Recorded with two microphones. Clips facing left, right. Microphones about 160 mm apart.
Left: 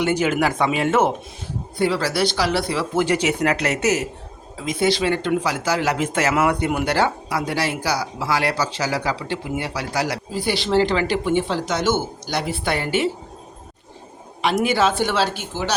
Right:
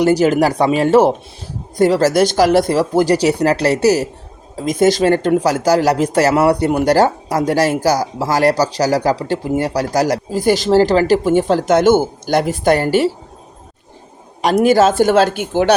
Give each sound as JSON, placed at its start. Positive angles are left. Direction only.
{"t": 0.0, "sound": "speech", "side_deg": -35}
{"t": 14.4, "sound": "speech", "side_deg": -40}